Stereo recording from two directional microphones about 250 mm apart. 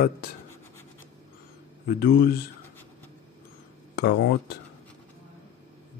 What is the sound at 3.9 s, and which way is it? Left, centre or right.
Speech, left.